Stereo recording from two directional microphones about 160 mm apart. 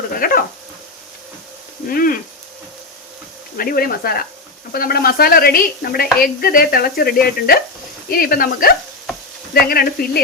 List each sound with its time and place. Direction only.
0.1 s a sound: 65° left (ahead or behind)
1.9 s speech: 65° left (ahead or behind)
3.6 s speech: 65° left (ahead or behind)